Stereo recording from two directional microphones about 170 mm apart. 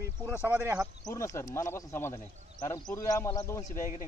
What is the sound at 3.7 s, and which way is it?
Speech, 50° left (ahead or behind).